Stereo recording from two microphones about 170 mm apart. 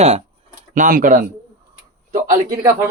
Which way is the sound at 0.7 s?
50° right (ahead or behind).